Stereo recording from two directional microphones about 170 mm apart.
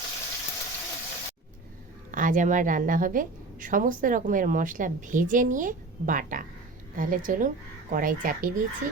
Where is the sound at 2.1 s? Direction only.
50° right (ahead or behind).